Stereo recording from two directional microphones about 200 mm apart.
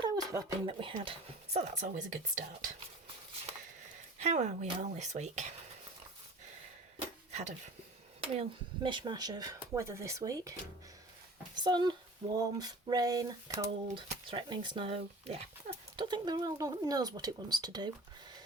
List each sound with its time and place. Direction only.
0.0 s speech: 15° right (ahead or behind); by 2.0 s 35° right (ahead or behind)
4.2 s speech: 35° right (ahead or behind)
7.3 s wood: 35° right (ahead or behind)
8.2 s speech: 25° right (ahead or behind)
11.5 s speech: 20° right (ahead or behind)